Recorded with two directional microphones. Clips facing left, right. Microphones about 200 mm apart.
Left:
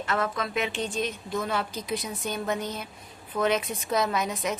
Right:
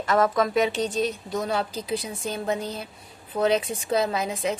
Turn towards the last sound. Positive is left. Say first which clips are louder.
# right 2 dB
turn(degrees=-30)  # may be behind; listen again after turning